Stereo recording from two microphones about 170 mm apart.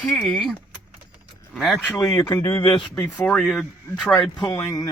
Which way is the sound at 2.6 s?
30° left (ahead or behind).